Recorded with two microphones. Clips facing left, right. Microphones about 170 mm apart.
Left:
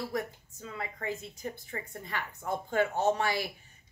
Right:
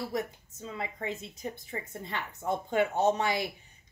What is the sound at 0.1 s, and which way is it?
A woman's voice, 20° right (ahead or behind).